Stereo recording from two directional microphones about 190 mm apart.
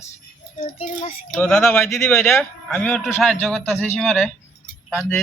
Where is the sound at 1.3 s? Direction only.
5° left (ahead or behind).